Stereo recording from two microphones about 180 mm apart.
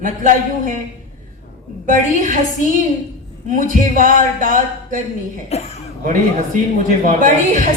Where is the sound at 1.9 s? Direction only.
45° right (ahead or behind).